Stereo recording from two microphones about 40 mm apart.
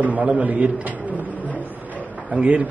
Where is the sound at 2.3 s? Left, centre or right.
Right.